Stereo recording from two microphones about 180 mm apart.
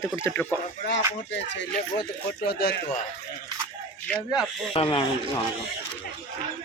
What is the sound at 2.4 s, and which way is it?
Speech, 60° left (ahead or behind).